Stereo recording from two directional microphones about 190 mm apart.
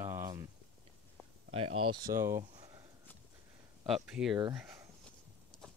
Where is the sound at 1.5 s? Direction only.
30° right (ahead or behind).